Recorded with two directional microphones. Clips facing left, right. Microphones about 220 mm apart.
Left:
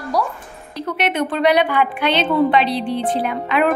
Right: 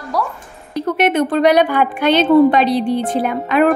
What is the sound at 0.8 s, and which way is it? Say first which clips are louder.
Speech: right 6 dB; 45° right (ahead or behind).